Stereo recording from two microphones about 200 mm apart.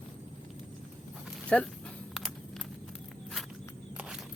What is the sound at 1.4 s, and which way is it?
Speech, 5° left (ahead or behind).